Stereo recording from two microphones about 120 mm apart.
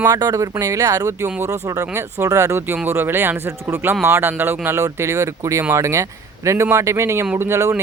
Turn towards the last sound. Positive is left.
turn(degrees=-20)  # may be behind; listen again after turning